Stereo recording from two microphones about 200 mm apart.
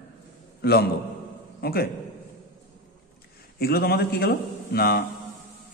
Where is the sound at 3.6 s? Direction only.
50° left (ahead or behind).